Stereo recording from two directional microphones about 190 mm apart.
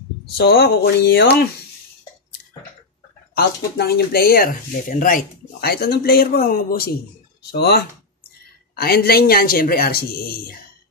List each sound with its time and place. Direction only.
0.4 s speech: 55° left (ahead or behind)
3.3 s speech: 55° left (ahead or behind)